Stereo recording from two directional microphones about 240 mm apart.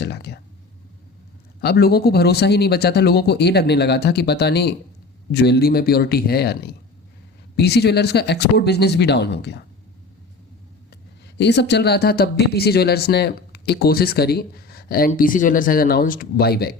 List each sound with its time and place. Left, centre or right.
0.0 s a sound: left
1.6 s speech: left
11.3 s speech: left